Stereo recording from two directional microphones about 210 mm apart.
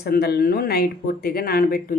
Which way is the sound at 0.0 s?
50° left (ahead or behind).